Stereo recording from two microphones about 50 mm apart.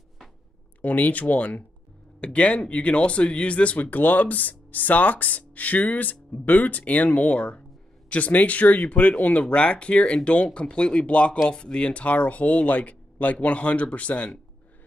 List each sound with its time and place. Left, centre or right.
0.8 s speech: left
3.8 s speech: left